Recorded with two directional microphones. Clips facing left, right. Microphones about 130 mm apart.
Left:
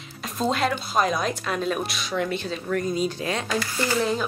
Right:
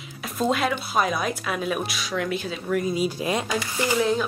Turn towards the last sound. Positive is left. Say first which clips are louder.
# right 2 dB
turn(degrees=0)  # may be behind; listen again after turning